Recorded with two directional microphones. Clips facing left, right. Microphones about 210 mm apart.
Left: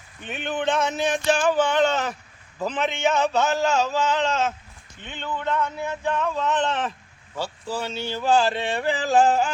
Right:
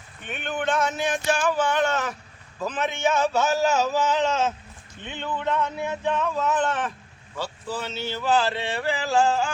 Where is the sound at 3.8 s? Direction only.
10° right (ahead or behind).